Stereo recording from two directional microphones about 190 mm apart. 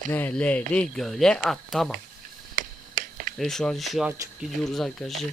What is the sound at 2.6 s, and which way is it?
Finger snapping, 45° right (ahead or behind).